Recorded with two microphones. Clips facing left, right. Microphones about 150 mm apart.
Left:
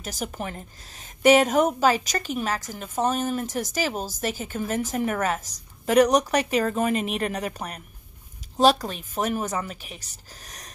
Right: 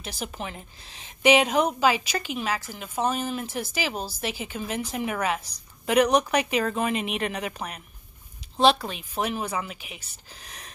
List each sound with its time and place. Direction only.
0.0 s a woman's voice: 45° left (ahead or behind)